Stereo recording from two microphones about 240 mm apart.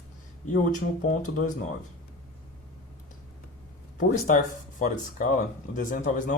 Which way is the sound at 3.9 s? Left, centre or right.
Left.